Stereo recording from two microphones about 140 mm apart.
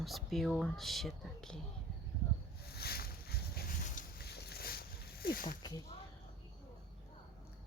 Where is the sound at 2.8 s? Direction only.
90° left.